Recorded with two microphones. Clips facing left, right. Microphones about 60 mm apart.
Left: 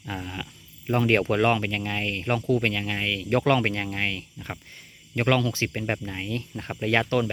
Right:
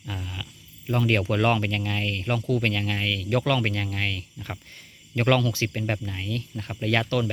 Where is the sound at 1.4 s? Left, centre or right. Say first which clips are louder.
Even; centre.